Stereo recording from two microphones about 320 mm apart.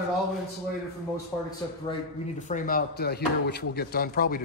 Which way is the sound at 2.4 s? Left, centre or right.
Left.